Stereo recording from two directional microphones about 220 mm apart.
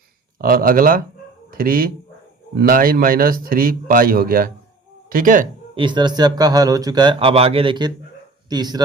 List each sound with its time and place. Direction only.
0.4 s speech: 40° right (ahead or behind)
5.7 s speech: 20° right (ahead or behind)